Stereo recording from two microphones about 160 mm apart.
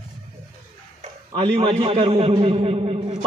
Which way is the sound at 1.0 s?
35° right (ahead or behind).